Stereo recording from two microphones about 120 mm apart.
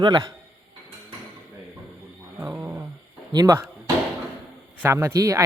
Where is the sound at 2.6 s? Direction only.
20° right (ahead or behind).